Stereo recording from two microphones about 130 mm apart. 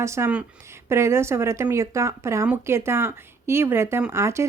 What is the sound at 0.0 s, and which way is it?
Speech, 20° right (ahead or behind).